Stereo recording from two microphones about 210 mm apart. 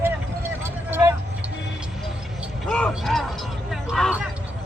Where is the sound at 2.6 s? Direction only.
5° left (ahead or behind).